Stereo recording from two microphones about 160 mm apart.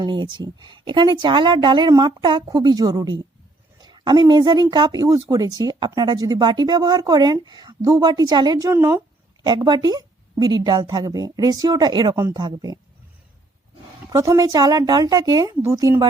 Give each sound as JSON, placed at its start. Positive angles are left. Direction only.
{"t": 0.0, "sound": "speech", "side_deg": -30}
{"t": 14.1, "sound": "speech", "side_deg": -20}